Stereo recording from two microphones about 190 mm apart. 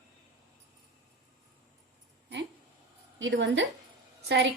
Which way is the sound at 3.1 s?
70° right (ahead or behind).